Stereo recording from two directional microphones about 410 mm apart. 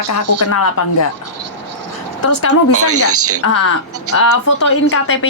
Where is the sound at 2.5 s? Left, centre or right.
Right.